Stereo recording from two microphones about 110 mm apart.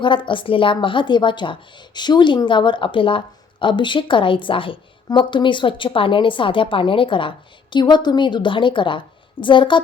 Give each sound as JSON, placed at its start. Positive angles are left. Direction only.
{"t": 0.0, "sound": "a woman's voice", "side_deg": 50}